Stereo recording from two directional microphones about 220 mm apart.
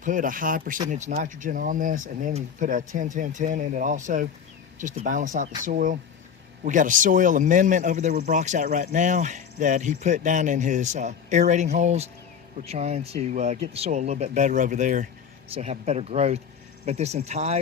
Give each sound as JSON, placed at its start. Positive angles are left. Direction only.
{"t": 0.0, "sound": "speech", "side_deg": -35}